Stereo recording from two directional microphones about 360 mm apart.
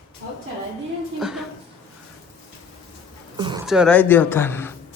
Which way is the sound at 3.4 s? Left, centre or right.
Centre.